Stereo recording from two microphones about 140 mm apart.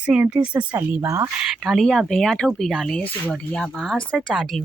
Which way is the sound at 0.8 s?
20° right (ahead or behind).